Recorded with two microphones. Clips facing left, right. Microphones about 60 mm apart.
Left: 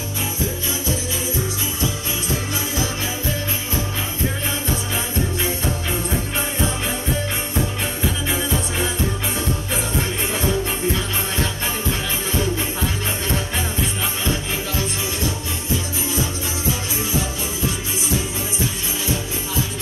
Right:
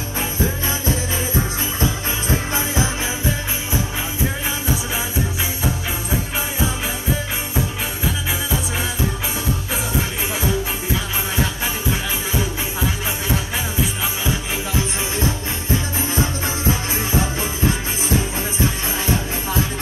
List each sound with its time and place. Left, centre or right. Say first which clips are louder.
1.8 s music: right 4 dB; right
3.7 s music: right 4 dB; centre
9.9 s music: even; centre
17.2 s music: right 3 dB; right